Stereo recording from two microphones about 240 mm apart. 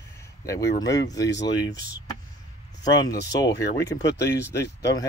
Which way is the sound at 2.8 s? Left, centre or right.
Centre.